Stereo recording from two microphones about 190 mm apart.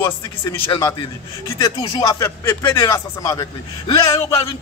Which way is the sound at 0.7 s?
15° left (ahead or behind).